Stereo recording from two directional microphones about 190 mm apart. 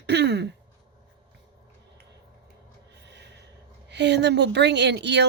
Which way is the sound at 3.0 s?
65° right (ahead or behind).